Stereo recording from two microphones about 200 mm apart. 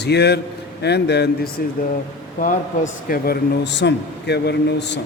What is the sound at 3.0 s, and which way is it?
A man's voice, 50° left (ahead or behind).